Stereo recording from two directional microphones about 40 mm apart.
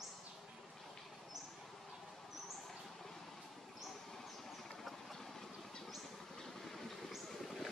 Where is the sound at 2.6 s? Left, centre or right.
Centre.